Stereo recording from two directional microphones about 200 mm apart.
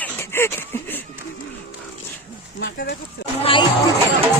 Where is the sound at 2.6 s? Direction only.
55° left (ahead or behind).